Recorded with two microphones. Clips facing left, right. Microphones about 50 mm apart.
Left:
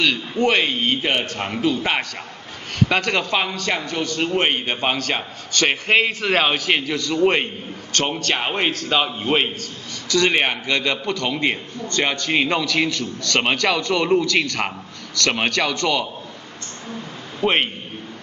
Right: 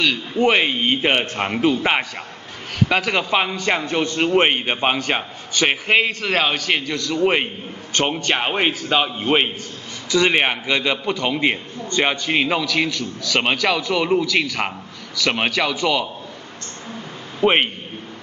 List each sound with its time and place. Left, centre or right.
0.4 s a man's voice: centre
2.9 s a man's voice: centre
17.4 s a man's voice: centre